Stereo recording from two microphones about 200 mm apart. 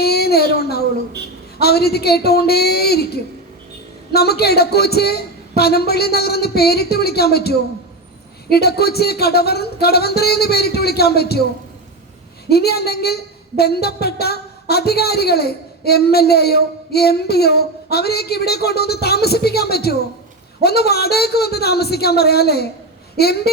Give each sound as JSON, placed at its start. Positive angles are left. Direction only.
{"t": 0.0, "sound": "a sound", "side_deg": 50}
{"t": 1.5, "sound": "a woman's voice", "side_deg": 50}
{"t": 12.5, "sound": "a woman's voice", "side_deg": 55}